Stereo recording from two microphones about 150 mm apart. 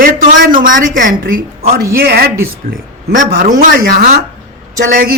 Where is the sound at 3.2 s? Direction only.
60° right (ahead or behind).